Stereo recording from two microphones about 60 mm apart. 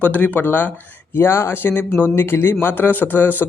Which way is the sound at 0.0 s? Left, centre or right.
Left.